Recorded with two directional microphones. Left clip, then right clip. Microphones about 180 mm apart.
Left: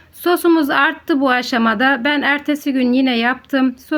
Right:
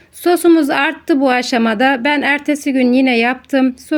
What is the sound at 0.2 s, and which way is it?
A woman's voice, 15° right (ahead or behind).